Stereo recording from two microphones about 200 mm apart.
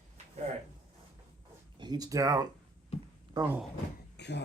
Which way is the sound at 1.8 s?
20° right (ahead or behind).